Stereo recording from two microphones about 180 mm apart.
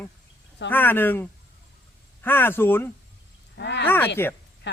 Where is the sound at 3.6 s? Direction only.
75° left (ahead or behind).